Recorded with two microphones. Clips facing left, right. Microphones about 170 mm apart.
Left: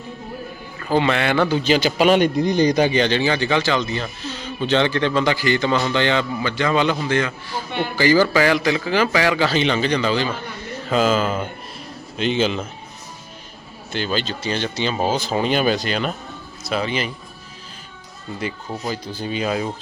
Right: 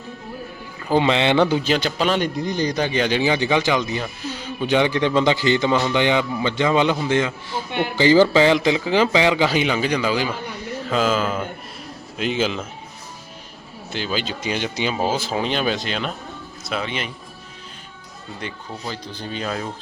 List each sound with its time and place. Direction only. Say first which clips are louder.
0.8 s a man's voice: right 1 dB; 15° right (ahead or behind)
1.6 s speech: left 3 dB; centre (ahead or behind)
2.0 s speech: left 5 dB; 15° left (ahead or behind)
2.9 s a man's voice: left 1 dB; 5° right (ahead or behind)
13.9 s speech: left 2 dB; 5° right (ahead or behind)
18.3 s speech: left 5 dB; 5° left (ahead or behind)